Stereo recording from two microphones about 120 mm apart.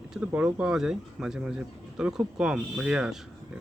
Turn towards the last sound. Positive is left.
turn(degrees=-5)  # may be behind; listen again after turning